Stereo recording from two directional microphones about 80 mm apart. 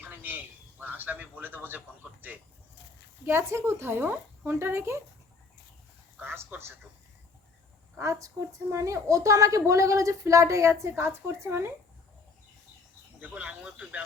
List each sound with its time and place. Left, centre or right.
0.0 s a sound: right
3.2 s speech: right
6.2 s a woman's voice: right
7.9 s a woman's voice: right
13.1 s speech: centre